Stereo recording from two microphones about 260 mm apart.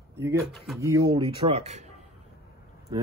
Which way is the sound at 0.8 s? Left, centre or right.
Centre.